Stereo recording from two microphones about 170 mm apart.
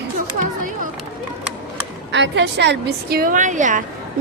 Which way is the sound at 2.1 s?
90° right.